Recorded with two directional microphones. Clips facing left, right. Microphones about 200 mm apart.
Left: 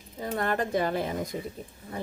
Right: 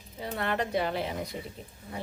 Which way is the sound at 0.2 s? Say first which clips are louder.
Left 3 dB; 45° left (ahead or behind).